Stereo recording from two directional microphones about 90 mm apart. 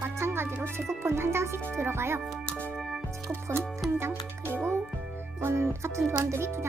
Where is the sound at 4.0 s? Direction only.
25° right (ahead or behind).